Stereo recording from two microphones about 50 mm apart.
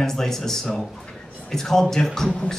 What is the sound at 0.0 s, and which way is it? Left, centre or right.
Speech, centre.